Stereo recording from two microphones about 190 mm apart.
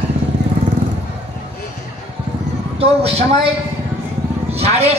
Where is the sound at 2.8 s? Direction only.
30° right (ahead or behind).